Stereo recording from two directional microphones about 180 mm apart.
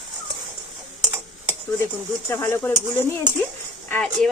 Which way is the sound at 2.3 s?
10° left (ahead or behind).